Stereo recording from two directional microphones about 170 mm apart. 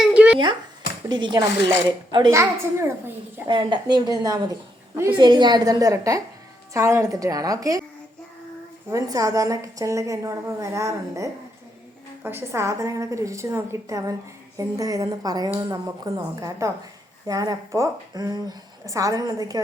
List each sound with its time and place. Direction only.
0.0 s a sound: 5° right (ahead or behind)
1.0 s a woman's voice: 25° right (ahead or behind)
2.3 s a woman's voice: 15° right (ahead or behind)
3.5 s a woman's voice: 30° right (ahead or behind)
8.9 s a woman's voice: 20° right (ahead or behind)